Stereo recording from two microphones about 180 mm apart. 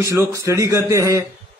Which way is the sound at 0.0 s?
20° right (ahead or behind).